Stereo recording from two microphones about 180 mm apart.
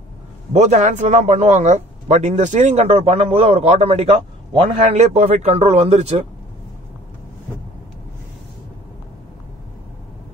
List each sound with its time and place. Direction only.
0.5 s a man's voice: 40° right (ahead or behind)